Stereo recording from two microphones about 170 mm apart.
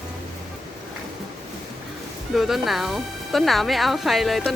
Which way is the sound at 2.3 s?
Centre (ahead or behind).